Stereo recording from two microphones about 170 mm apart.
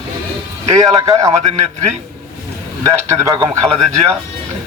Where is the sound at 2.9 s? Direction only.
20° right (ahead or behind).